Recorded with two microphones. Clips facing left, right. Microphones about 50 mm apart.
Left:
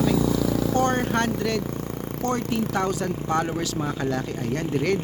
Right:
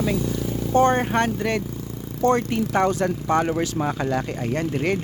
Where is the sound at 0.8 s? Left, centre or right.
Right.